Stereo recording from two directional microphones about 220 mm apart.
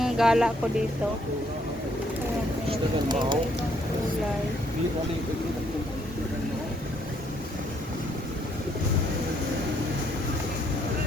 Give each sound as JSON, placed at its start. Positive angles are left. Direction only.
{"t": 0.0, "sound": "speech", "side_deg": 0}
{"t": 2.6, "sound": "speech", "side_deg": -20}